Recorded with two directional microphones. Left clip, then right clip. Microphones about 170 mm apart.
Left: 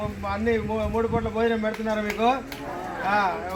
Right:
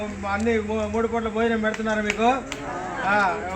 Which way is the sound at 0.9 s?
15° right (ahead or behind).